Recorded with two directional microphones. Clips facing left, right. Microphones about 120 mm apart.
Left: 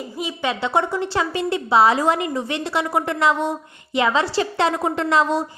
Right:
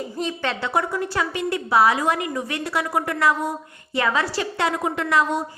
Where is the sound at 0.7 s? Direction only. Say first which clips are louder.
Left 2 dB; 25° left (ahead or behind).